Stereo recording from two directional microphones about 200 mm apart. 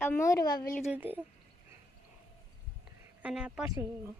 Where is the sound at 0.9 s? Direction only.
10° right (ahead or behind).